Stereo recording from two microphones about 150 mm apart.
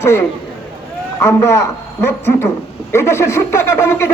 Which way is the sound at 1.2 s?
20° left (ahead or behind).